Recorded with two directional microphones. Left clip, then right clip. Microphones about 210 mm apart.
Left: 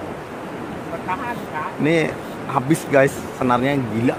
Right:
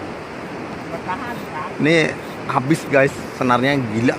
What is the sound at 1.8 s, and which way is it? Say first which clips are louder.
A man's voice: right 3 dB; 5° right (ahead or behind).